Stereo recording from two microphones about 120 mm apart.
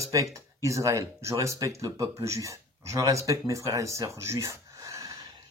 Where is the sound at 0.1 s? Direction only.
25° right (ahead or behind).